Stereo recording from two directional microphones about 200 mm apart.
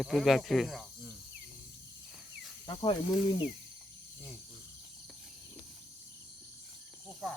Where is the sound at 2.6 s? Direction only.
25° left (ahead or behind).